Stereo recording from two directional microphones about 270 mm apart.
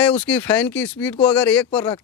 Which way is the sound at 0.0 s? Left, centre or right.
Centre.